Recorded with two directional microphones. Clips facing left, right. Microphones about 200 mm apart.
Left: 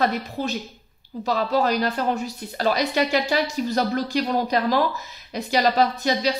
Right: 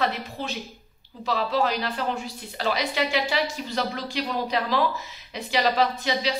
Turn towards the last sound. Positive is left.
turn(degrees=40)  # may be behind; listen again after turning